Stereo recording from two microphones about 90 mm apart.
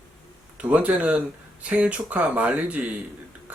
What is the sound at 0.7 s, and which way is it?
Speech, 15° right (ahead or behind).